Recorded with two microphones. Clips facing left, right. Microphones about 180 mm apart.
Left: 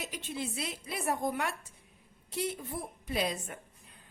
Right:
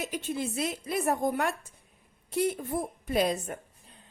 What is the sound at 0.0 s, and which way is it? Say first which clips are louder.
A woman's voice: right 6 dB; 45° right (ahead or behind).